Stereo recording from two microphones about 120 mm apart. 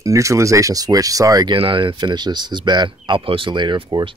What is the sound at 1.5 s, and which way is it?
Speech, 45° right (ahead or behind).